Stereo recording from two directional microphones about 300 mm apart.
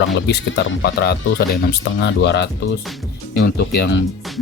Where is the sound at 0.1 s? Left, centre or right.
Left.